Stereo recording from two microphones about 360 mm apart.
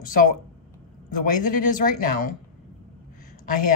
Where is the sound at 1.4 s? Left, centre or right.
Left.